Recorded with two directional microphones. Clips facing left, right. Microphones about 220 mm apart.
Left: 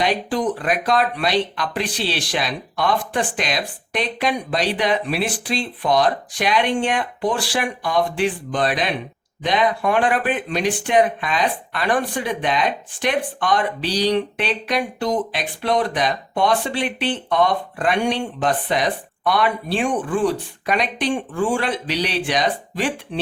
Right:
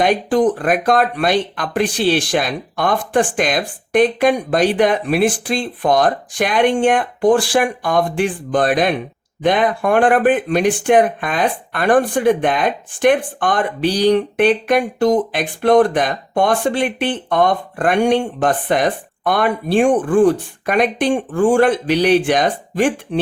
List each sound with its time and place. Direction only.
0.0 s speech: 50° right (ahead or behind)